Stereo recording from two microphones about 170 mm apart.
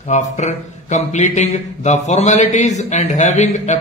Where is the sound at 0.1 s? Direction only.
40° left (ahead or behind).